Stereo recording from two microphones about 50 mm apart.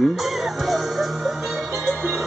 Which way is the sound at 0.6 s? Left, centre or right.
Centre.